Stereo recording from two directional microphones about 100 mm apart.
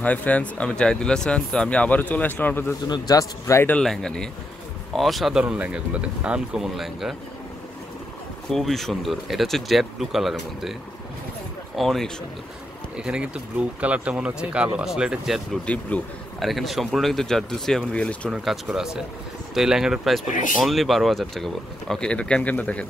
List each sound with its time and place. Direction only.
0.0 s speech: 15° left (ahead or behind)
2.9 s a man's voice: 35° left (ahead or behind)
3.8 s speech: 5° left (ahead or behind)
5.4 s speech: 10° right (ahead or behind)
8.5 s speech: 5° left (ahead or behind)
15.6 s speech: 15° left (ahead or behind)
16.3 s speech: centre (ahead or behind)
18.3 s speech: 5° right (ahead or behind); by 22.8 s 15° left (ahead or behind)